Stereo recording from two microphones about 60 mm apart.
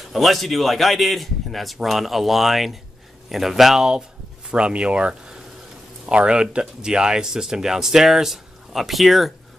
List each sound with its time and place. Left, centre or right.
0.1 s a man's voice: centre